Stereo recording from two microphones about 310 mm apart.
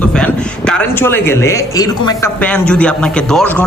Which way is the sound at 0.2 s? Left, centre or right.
Centre.